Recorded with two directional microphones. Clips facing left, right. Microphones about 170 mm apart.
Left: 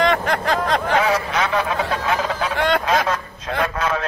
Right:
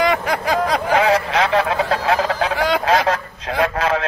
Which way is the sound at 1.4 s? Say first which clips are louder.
Right 3 dB; 35° right (ahead or behind).